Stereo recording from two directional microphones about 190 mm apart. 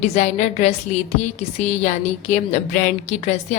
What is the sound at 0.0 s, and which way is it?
A woman's voice, 35° left (ahead or behind).